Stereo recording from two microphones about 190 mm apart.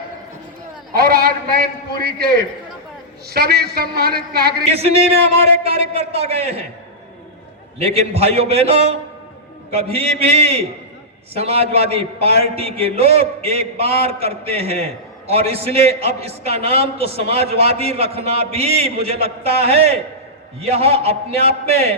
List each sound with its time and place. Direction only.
0.9 s a man's voice: 50° right (ahead or behind)
4.7 s a man's voice: 35° right (ahead or behind)
7.8 s a man's voice: 35° right (ahead or behind)